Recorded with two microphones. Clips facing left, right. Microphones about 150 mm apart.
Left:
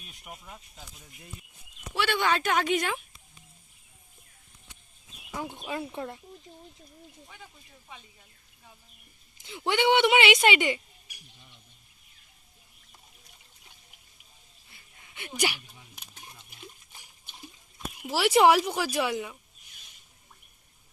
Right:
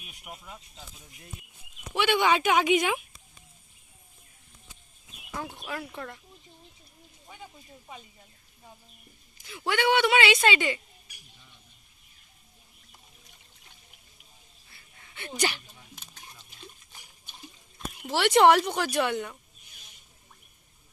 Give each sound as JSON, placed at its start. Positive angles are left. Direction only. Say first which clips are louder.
{"t": 0.4, "sound": "speech", "louder": "right 1 dB", "side_deg": 5}
{"t": 1.9, "sound": "speech", "louder": "right 3 dB", "side_deg": -15}
{"t": 5.4, "sound": "a woman's voice", "louder": "left 2 dB", "side_deg": 15}
{"t": 9.4, "sound": "a woman's voice", "louder": "left 1 dB", "side_deg": 20}
{"t": 14.7, "sound": "a sound", "louder": "even", "side_deg": 15}
{"t": 18.0, "sound": "speech", "louder": "right 1 dB", "side_deg": 5}